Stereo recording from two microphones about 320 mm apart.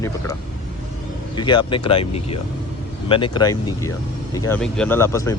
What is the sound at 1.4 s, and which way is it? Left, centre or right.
Speech, centre.